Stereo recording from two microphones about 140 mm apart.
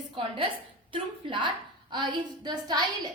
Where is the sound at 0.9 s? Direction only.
35° right (ahead or behind).